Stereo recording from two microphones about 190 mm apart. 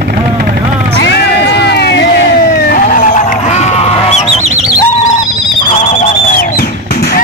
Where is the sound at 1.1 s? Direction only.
60° left (ahead or behind); by 4.3 s 35° left (ahead or behind).